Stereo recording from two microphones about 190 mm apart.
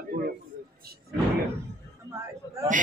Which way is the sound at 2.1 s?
15° right (ahead or behind).